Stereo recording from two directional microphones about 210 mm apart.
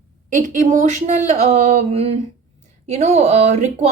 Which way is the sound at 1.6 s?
30° right (ahead or behind).